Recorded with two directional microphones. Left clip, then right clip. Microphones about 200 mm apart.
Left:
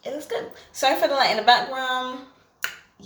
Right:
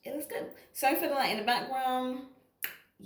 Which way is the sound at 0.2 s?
10° left (ahead or behind).